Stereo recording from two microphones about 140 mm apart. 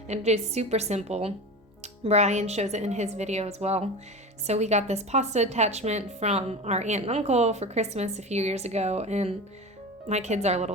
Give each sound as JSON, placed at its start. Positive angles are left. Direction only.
{"t": 0.1, "sound": "a woman's voice", "side_deg": -50}